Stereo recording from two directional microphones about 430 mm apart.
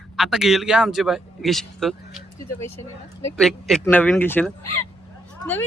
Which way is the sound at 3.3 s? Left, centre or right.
Centre.